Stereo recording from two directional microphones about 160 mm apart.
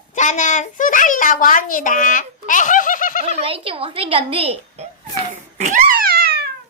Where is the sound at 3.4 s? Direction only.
35° right (ahead or behind).